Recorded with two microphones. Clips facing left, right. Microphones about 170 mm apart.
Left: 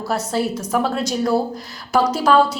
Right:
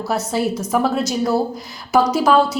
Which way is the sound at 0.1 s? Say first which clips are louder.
Right 1 dB; 10° right (ahead or behind).